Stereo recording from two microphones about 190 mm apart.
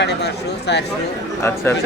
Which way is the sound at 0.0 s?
65° left (ahead or behind).